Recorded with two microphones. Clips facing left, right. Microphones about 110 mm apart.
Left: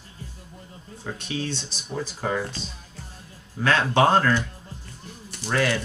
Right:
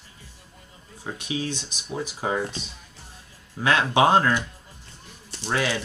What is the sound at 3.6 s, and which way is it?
Speech, 15° right (ahead or behind).